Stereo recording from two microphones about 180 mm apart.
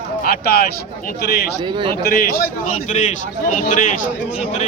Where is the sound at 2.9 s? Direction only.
40° left (ahead or behind).